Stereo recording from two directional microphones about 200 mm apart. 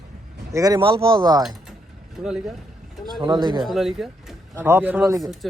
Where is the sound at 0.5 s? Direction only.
20° right (ahead or behind).